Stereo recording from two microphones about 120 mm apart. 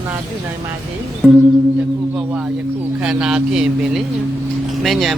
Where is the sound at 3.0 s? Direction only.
5° right (ahead or behind).